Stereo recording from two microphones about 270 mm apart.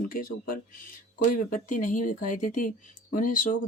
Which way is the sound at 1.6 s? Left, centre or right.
Left.